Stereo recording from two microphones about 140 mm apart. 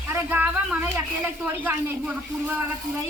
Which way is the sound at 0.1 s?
15° right (ahead or behind).